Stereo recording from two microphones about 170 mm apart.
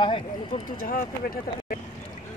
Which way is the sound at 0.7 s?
55° left (ahead or behind).